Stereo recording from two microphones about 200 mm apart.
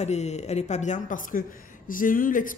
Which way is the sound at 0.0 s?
35° left (ahead or behind).